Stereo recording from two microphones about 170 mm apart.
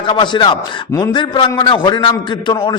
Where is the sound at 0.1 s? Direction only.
25° left (ahead or behind).